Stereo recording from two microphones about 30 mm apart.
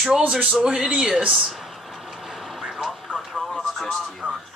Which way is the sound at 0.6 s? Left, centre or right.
Right.